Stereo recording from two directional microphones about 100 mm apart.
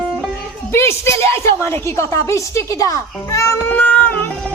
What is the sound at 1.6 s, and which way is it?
A woman's voice, 30° left (ahead or behind).